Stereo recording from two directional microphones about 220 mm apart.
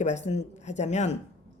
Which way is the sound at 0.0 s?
30° left (ahead or behind).